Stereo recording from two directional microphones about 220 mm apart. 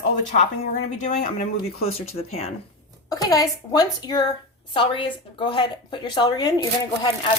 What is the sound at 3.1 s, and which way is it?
A woman's voice, 15° left (ahead or behind).